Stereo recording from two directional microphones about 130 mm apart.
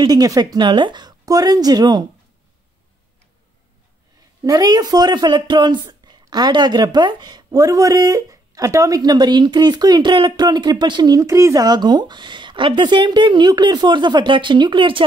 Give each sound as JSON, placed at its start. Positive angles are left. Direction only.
{"t": 0.0, "sound": "speech", "side_deg": -30}
{"t": 4.4, "sound": "speech", "side_deg": -30}